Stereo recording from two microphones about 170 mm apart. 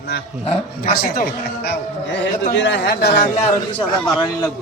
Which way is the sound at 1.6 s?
80° left.